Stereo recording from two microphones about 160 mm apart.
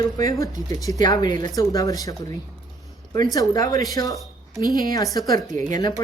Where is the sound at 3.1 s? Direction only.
25° left (ahead or behind).